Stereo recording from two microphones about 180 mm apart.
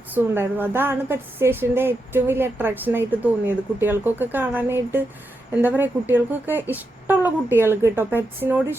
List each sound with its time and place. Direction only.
0.1 s a woman's voice: 10° right (ahead or behind)